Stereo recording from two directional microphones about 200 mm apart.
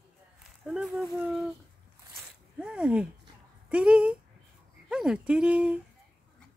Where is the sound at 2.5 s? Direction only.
5° right (ahead or behind).